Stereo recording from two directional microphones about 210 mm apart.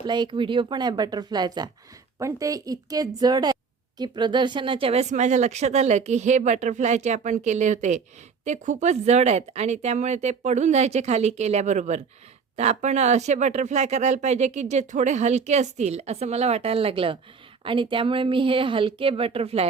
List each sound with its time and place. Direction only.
0.0 s a woman's voice: 20° right (ahead or behind)